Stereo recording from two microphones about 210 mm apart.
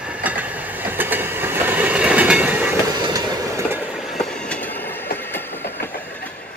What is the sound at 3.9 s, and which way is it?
Train, centre (ahead or behind).